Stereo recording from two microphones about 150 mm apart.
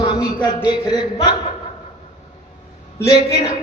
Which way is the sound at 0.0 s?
30° left (ahead or behind).